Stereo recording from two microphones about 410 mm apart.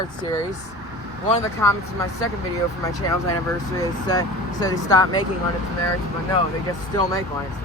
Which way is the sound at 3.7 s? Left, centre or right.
Centre.